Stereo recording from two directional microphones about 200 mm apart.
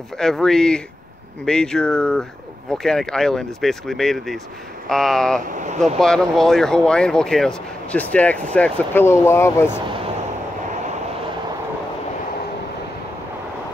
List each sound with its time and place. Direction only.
0.2 s speech: centre (ahead or behind)
5.5 s speech: 40° right (ahead or behind)
5.9 s speech: centre (ahead or behind)